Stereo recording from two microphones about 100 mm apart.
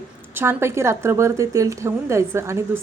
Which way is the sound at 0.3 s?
25° right (ahead or behind).